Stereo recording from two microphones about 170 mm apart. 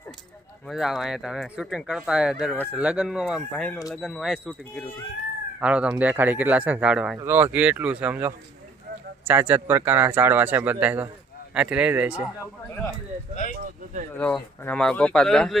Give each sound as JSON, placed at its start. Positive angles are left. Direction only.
{"t": 0.7, "sound": "speech", "side_deg": 0}
{"t": 5.5, "sound": "a man's voice", "side_deg": -5}
{"t": 13.3, "sound": "speech", "side_deg": 50}
{"t": 14.1, "sound": "speech", "side_deg": 10}